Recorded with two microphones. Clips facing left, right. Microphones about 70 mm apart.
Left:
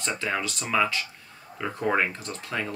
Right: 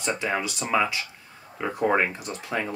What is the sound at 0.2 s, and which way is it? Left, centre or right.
Speech, centre.